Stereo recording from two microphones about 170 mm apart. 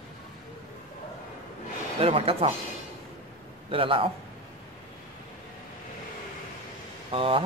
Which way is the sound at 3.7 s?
30° right (ahead or behind).